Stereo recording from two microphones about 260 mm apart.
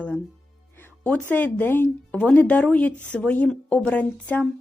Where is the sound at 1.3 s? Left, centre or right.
Centre.